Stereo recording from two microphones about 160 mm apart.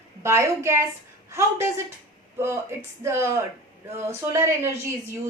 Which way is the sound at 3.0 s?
15° right (ahead or behind).